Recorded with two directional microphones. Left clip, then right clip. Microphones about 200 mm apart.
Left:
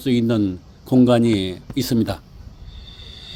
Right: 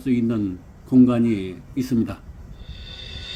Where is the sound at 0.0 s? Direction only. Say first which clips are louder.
Left 4 dB; 45° left (ahead or behind).